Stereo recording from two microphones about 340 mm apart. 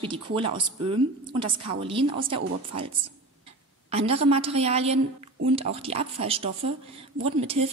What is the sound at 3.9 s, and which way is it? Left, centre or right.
A woman's voice, centre.